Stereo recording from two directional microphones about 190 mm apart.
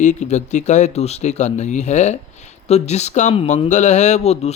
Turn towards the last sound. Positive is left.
turn(degrees=35)  # may be behind; listen again after turning